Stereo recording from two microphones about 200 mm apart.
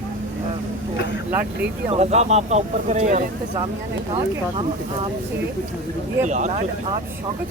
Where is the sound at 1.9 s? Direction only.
35° right (ahead or behind).